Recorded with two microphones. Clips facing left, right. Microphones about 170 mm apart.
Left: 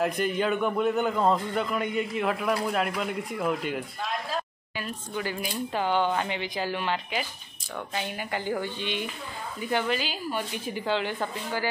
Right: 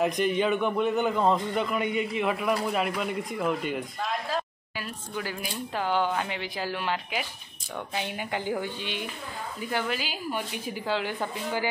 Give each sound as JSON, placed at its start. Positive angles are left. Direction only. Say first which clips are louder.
{"t": 0.0, "sound": "a man's voice", "louder": "right 1 dB", "side_deg": 0}
{"t": 7.9, "sound": "a woman's voice", "louder": "even", "side_deg": -15}